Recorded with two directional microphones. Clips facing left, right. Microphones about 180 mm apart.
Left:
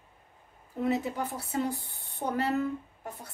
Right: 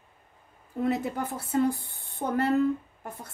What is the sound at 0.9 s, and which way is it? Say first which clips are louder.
Speech: right 1 dB; 55° right (ahead or behind).